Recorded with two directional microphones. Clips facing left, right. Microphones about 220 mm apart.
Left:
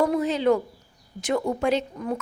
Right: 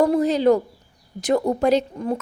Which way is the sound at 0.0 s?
40° right (ahead or behind).